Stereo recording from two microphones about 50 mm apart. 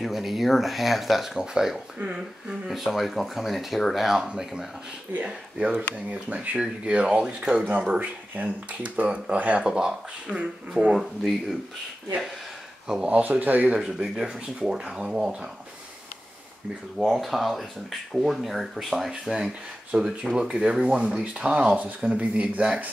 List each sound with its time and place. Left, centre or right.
0.0 s speech: centre
1.4 s speech: centre
2.7 s speech: centre
5.1 s speech: right
9.7 s speech: centre
11.0 s speech: centre
13.0 s speech: right
13.7 s speech: centre
17.1 s speech: centre; by 22.7 s right